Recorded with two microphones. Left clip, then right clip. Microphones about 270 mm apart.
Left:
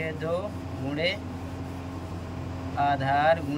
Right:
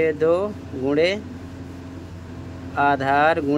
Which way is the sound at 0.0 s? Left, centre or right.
Centre.